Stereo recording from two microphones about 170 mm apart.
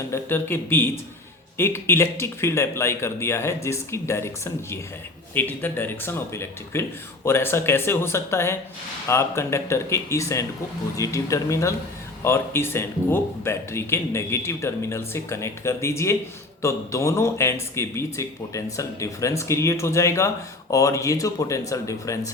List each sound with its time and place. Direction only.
0.1 s speech: 10° left (ahead or behind)